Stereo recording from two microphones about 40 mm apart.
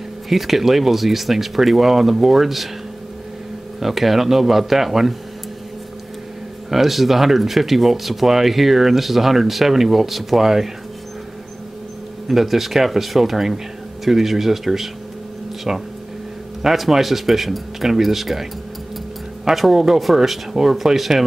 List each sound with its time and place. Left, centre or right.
0.3 s speech: centre
3.8 s speech: centre
6.7 s speech: centre
12.3 s speech: centre
16.6 s speech: centre
19.5 s speech: centre